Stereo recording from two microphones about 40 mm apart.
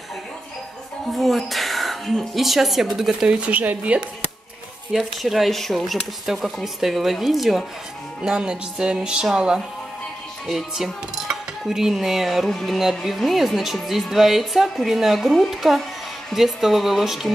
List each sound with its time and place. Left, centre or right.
1.1 s speech: centre
3.3 s a woman's voice: right
4.9 s speech: centre
6.2 s speech: centre
8.2 s speech: right
10.4 s speech: centre
12.4 s music: centre
13.0 s speech: centre